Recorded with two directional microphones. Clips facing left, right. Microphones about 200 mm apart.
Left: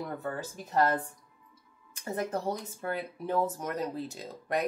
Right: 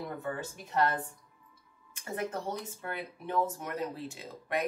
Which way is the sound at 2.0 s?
40° left (ahead or behind).